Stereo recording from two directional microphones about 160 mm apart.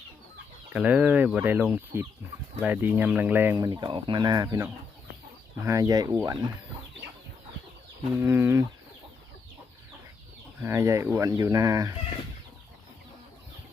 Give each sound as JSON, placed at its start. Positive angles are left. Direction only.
{"t": 0.7, "sound": "speech", "side_deg": -10}
{"t": 8.1, "sound": "speech", "side_deg": -15}
{"t": 10.6, "sound": "speech", "side_deg": -15}